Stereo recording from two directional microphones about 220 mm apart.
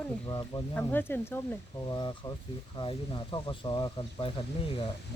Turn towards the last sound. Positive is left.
turn(degrees=25)  # may be behind; listen again after turning